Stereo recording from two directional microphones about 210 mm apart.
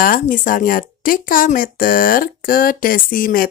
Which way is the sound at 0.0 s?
40° left (ahead or behind).